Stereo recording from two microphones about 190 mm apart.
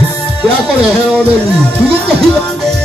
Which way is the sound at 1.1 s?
5° left (ahead or behind).